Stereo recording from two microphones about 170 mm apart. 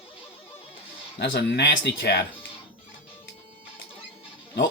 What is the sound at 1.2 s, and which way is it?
Speech, 85° left.